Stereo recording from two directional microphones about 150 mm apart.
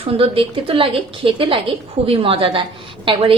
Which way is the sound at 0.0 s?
35° right (ahead or behind).